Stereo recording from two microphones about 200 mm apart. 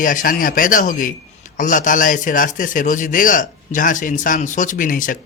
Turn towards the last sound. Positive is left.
turn(degrees=40)  # may be behind; listen again after turning